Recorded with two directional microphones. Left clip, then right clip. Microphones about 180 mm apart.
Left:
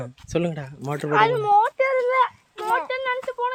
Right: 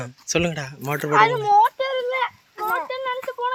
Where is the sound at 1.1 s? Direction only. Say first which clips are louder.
Right 2 dB; 60° left (ahead or behind).